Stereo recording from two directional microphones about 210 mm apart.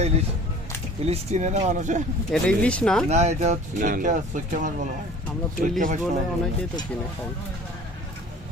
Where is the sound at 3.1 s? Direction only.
30° right (ahead or behind).